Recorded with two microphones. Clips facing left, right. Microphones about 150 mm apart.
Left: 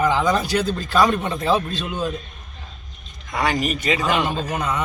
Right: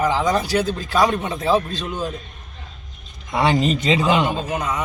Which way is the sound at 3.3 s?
25° right (ahead or behind).